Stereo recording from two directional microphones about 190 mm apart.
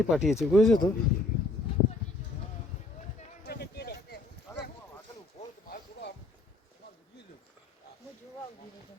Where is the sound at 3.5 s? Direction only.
55° left (ahead or behind).